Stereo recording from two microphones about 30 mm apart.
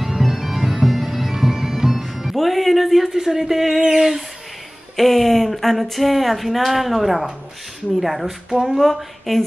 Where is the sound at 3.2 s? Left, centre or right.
Centre.